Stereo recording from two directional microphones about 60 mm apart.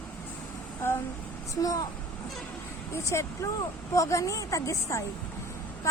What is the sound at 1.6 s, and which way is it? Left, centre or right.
Speech, left.